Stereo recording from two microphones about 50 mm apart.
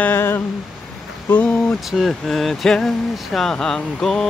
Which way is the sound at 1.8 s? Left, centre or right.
Centre.